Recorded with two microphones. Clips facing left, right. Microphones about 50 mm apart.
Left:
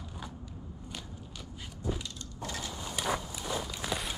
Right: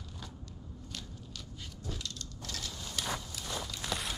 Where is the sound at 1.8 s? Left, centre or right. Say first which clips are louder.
Left 6 dB; centre.